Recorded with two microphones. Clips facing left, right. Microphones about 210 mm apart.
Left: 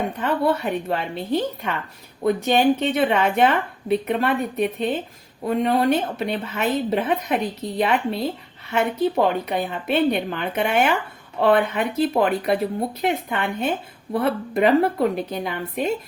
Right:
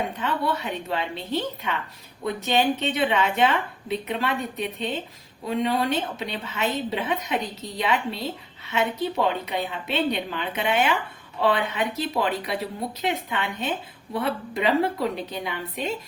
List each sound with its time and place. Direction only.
0.2 s speech: 50° left (ahead or behind)
2.5 s a woman's voice: 60° left (ahead or behind)